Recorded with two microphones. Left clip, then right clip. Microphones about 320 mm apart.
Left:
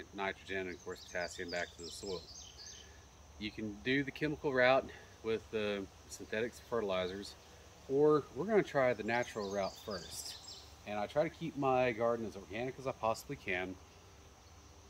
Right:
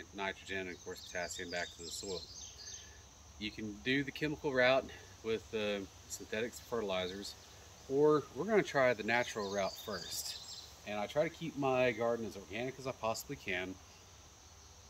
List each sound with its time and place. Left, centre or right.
0.0 s speech: centre
3.3 s speech: centre